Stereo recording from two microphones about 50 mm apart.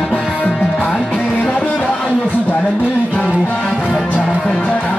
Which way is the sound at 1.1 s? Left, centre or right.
Left.